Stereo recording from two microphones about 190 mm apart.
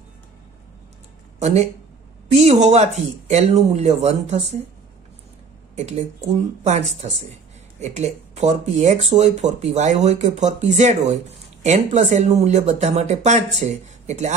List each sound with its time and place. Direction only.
1.4 s speech: 35° right (ahead or behind)
5.8 s speech: 35° right (ahead or behind)